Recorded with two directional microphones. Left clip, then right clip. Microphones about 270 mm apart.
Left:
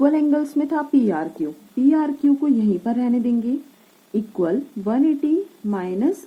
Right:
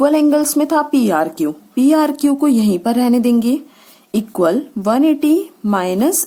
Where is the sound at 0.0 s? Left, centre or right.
Right.